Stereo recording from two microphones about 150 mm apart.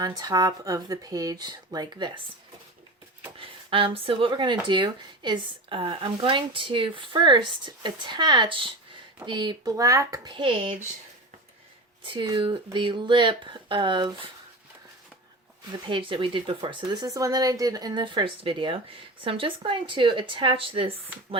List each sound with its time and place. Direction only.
0.0 s speech: 25° right (ahead or behind)
3.3 s speech: 35° right (ahead or behind)
12.0 s speech: 30° right (ahead or behind)
15.9 s speech: 35° right (ahead or behind)